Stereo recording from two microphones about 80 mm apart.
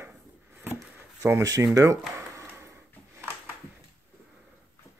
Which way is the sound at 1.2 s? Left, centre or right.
Right.